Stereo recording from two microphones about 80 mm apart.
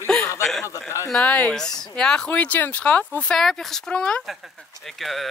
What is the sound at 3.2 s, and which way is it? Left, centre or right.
A man's voice, centre.